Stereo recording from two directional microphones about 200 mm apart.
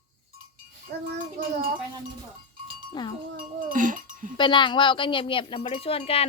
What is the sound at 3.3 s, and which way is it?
Speech, 40° right (ahead or behind).